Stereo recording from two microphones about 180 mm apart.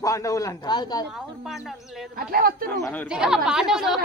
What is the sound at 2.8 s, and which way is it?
Speech, 10° left (ahead or behind).